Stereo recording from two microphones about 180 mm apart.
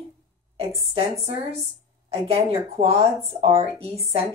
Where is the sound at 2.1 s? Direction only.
35° right (ahead or behind).